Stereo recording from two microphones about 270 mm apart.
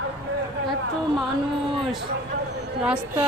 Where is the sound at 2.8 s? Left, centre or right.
Centre.